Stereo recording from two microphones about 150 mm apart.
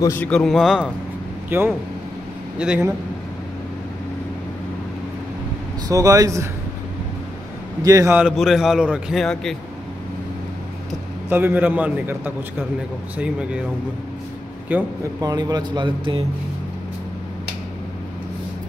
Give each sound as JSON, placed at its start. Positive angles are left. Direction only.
{"t": 0.0, "sound": "a man's voice", "side_deg": 15}
{"t": 0.3, "sound": "a man's voice", "side_deg": 5}
{"t": 1.5, "sound": "a man's voice", "side_deg": -15}
{"t": 5.9, "sound": "speech", "side_deg": -25}
{"t": 7.8, "sound": "speech", "side_deg": -20}
{"t": 8.2, "sound": "a man's voice", "side_deg": -5}
{"t": 11.2, "sound": "a man's voice", "side_deg": -15}
{"t": 14.7, "sound": "a man's voice", "side_deg": -10}
{"t": 15.2, "sound": "speech", "side_deg": -25}